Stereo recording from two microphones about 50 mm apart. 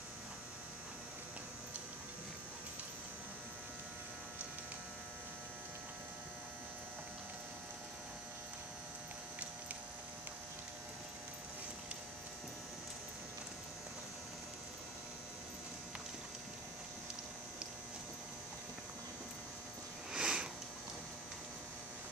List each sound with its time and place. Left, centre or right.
20.1 s sniff: centre